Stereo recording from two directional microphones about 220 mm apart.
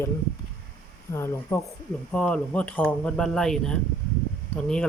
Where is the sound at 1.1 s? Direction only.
10° left (ahead or behind).